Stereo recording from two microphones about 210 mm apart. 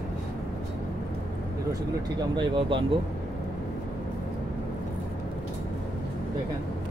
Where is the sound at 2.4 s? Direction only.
25° right (ahead or behind).